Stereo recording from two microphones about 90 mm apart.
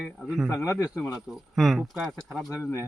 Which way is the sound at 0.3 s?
5° right (ahead or behind).